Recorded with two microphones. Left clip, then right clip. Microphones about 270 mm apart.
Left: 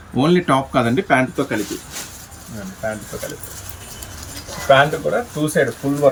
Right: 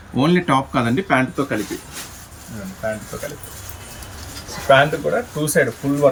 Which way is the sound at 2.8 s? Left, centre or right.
Centre.